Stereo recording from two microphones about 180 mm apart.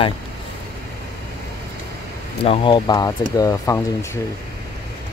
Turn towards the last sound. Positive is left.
turn(degrees=20)  # may be behind; listen again after turning